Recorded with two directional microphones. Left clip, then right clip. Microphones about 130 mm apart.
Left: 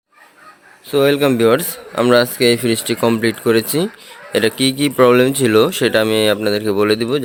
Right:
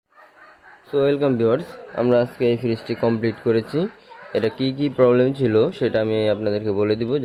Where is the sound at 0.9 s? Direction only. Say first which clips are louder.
Left 5 dB; 20° left (ahead or behind).